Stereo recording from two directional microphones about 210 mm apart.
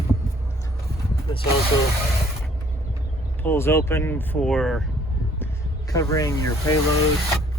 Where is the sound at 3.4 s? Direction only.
10° left (ahead or behind).